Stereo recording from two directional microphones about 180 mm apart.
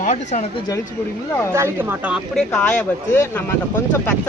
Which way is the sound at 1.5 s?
15° right (ahead or behind).